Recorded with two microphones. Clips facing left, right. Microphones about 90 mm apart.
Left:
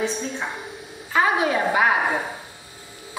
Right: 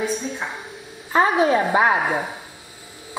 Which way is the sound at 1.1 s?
30° right (ahead or behind).